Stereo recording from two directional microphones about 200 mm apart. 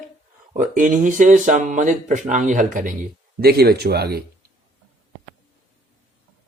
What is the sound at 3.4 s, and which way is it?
Speech, 50° right (ahead or behind).